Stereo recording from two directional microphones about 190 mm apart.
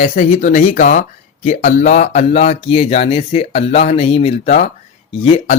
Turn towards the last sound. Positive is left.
turn(degrees=35)  # may be behind; listen again after turning